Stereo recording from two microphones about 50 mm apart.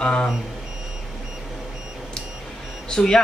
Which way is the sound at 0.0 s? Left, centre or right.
Centre.